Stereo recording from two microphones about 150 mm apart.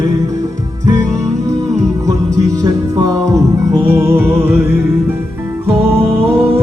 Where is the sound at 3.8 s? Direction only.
15° right (ahead or behind).